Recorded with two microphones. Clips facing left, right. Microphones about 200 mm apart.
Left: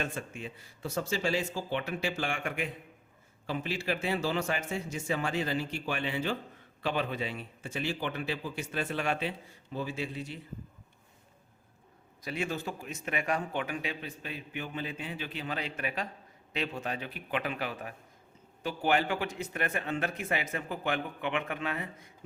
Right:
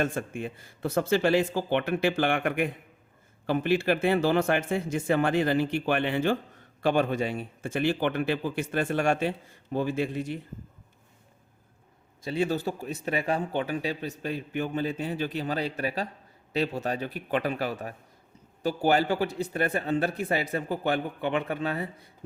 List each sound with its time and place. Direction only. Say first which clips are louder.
0.0 s a man's voice: right 7 dB; 50° right (ahead or behind)
12.2 s a man's voice: right 7 dB; 30° right (ahead or behind)